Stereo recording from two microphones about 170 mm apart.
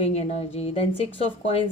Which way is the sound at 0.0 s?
35° left (ahead or behind).